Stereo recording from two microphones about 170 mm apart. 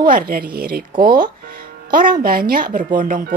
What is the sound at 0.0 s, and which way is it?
Speech, 55° right (ahead or behind).